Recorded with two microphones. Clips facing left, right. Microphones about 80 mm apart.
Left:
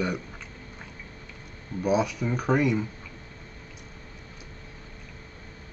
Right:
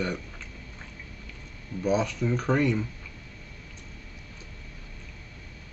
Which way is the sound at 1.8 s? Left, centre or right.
Centre.